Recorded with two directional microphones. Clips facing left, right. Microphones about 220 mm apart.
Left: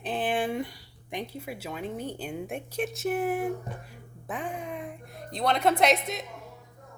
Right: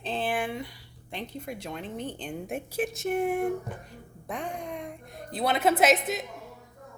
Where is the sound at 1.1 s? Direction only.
10° left (ahead or behind).